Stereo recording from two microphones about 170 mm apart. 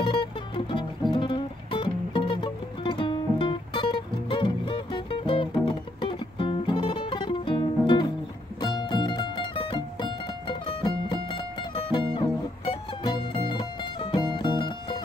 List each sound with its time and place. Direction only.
0.0 s music: 30° left (ahead or behind)